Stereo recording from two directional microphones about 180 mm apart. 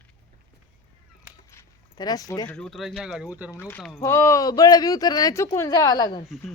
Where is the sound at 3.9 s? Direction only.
15° left (ahead or behind).